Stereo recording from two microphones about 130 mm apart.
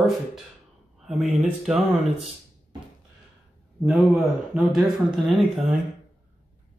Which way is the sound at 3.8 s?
Centre (ahead or behind).